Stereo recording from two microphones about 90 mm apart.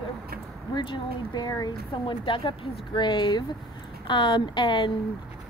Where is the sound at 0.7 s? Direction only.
55° left (ahead or behind).